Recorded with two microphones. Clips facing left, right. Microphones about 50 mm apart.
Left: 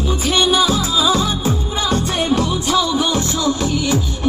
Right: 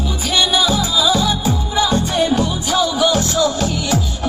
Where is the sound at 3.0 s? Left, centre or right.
Left.